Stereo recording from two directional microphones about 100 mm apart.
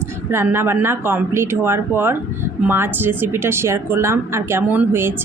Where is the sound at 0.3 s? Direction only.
25° right (ahead or behind).